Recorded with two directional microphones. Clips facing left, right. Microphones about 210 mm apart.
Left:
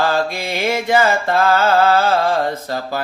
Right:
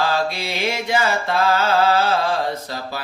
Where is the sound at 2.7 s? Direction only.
50° left (ahead or behind).